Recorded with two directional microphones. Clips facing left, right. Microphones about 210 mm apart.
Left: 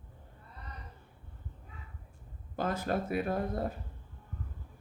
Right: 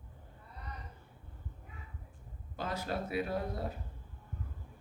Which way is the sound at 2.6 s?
50° left (ahead or behind).